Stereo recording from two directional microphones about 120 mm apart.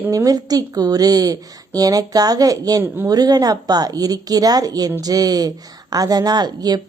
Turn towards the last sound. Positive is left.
turn(degrees=-35)  # may be behind; listen again after turning